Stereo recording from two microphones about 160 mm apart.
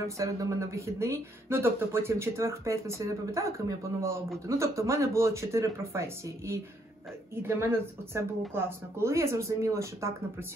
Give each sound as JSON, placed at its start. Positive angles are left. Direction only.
{"t": 0.2, "sound": "speech", "side_deg": -20}